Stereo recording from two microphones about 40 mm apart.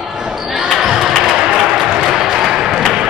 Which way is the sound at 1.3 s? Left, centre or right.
Right.